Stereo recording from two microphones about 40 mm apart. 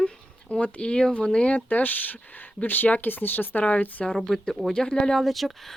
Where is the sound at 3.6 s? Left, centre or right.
Left.